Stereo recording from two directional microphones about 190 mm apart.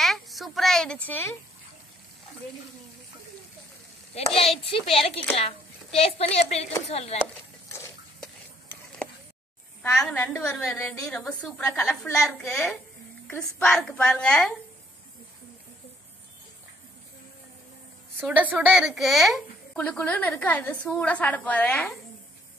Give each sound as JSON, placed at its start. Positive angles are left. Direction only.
{"t": 0.0, "sound": "a sound", "side_deg": 0}
{"t": 4.6, "sound": "a woman's voice", "side_deg": 30}
{"t": 9.9, "sound": "a woman's voice", "side_deg": 5}
{"t": 18.2, "sound": "a woman's voice", "side_deg": -10}